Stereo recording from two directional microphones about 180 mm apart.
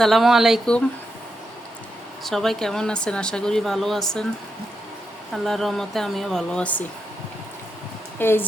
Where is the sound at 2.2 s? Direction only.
Centre (ahead or behind).